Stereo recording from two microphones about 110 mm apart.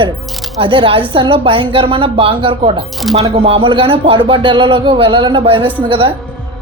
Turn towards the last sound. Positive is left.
turn(degrees=-55)  # may be behind; listen again after turning